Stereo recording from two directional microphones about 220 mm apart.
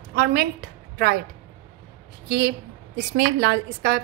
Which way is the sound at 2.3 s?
50° right (ahead or behind).